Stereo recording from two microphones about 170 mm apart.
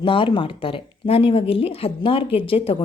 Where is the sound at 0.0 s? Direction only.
30° left (ahead or behind).